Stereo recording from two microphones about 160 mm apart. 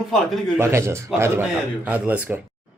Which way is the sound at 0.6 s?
15° right (ahead or behind).